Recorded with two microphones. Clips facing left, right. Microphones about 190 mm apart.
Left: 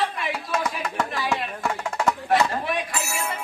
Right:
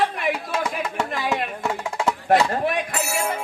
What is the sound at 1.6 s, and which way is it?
Music, 10° right (ahead or behind).